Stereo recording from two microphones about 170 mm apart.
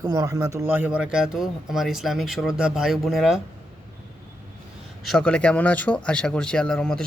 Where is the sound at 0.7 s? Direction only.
10° right (ahead or behind).